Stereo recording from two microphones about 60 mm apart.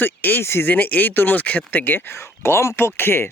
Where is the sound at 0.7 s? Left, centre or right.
Left.